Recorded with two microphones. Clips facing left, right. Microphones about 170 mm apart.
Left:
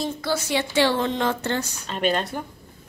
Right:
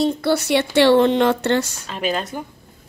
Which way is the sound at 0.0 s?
65° right (ahead or behind).